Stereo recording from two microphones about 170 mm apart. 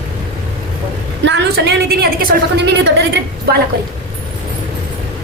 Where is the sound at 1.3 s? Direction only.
80° right.